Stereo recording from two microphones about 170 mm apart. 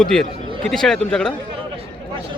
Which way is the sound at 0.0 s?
5° left (ahead or behind).